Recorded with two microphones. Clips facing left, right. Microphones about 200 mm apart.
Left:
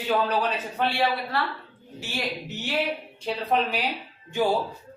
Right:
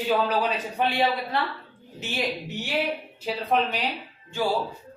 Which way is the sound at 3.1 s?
5° right (ahead or behind).